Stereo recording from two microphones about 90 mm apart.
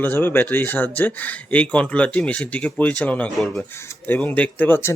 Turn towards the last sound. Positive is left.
turn(degrees=20)  # may be behind; listen again after turning